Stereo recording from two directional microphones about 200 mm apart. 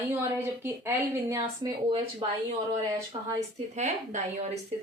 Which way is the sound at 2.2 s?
25° right (ahead or behind).